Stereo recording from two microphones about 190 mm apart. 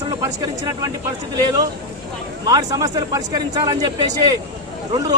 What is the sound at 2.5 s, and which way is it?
A man's voice, 20° right (ahead or behind).